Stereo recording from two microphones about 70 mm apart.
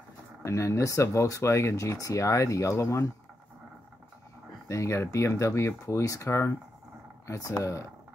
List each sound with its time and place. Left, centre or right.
0.4 s speech: left
4.6 s speech: left